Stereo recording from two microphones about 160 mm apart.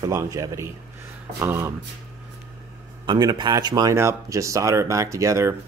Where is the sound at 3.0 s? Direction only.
25° right (ahead or behind).